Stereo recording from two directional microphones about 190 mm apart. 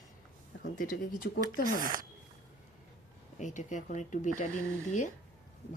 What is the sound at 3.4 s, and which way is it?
Speech, 40° left (ahead or behind).